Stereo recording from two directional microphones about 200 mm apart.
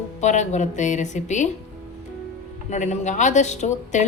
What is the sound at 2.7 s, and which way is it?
A woman's voice, 35° left (ahead or behind).